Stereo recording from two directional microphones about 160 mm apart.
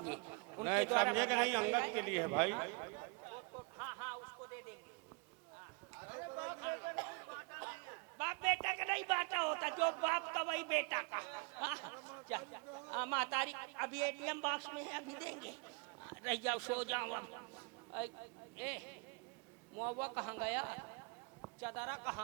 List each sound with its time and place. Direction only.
0.0 s a sound: 15° right (ahead or behind)
5.9 s a man's voice: 15° right (ahead or behind)
18.5 s a woman's voice: 10° right (ahead or behind)